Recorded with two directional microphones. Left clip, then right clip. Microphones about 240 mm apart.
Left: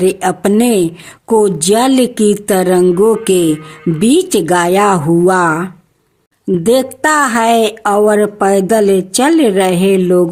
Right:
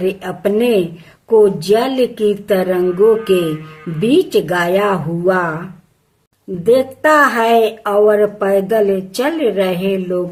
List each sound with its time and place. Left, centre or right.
0.0 s a woman's voice: left